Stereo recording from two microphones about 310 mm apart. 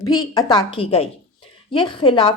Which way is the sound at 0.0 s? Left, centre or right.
Centre.